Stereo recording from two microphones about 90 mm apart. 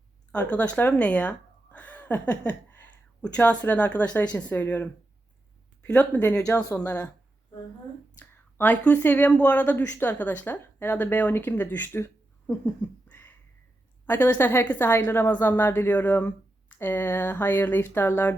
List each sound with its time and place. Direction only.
0.3 s speech: 15° left (ahead or behind)
6.2 s a woman's voice: 30° left (ahead or behind)
8.2 s a woman's voice: 20° left (ahead or behind)